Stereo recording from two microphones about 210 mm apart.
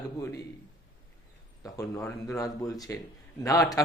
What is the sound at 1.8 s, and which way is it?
Speech, 10° left (ahead or behind).